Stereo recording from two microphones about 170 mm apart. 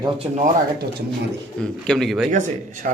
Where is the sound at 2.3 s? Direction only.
50° right (ahead or behind).